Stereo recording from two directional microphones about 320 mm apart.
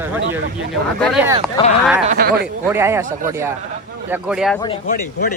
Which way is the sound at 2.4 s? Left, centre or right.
Centre.